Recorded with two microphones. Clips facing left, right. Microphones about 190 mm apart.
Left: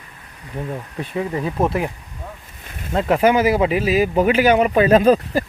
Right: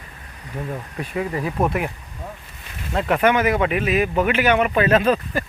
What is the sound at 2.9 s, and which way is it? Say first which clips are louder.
Speech: left 3 dB; 30° left (ahead or behind).